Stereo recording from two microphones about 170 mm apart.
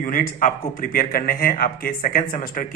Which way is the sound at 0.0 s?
55° left (ahead or behind).